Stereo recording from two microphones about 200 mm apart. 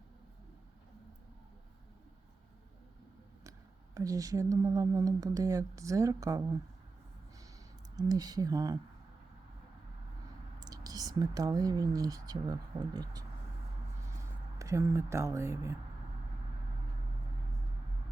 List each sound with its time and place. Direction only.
3.9 s speech: 15° right (ahead or behind)
7.9 s speech: 20° right (ahead or behind)
10.6 s speech: 20° right (ahead or behind)
14.6 s speech: 15° right (ahead or behind)